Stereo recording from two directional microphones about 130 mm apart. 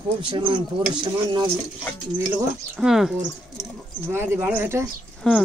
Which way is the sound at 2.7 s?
5° right (ahead or behind).